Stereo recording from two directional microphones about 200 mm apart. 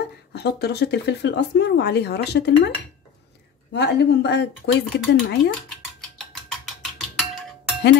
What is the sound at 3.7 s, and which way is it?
Cutlery, 55° left (ahead or behind).